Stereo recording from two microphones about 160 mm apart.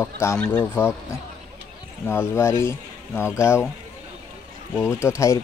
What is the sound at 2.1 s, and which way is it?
Speech, 15° left (ahead or behind).